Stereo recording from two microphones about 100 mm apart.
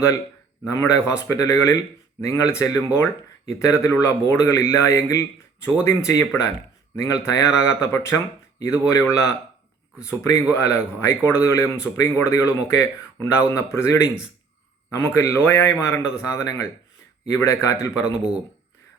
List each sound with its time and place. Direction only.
0.7 s speech: 30° left (ahead or behind)